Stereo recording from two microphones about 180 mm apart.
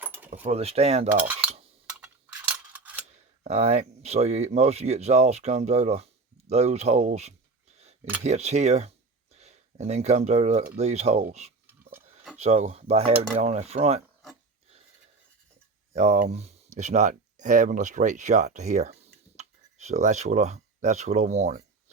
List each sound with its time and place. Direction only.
0.0 s keys jangling: 10° right (ahead or behind)
0.4 s speech: 35° right (ahead or behind)
1.1 s speech: 10° right (ahead or behind)
1.9 s a sound: 5° right (ahead or behind)
3.4 s speech: 35° right (ahead or behind)
11.6 s a sound: 10° right (ahead or behind)
12.4 s speech: 40° right (ahead or behind)
15.9 s speech: 35° right (ahead or behind)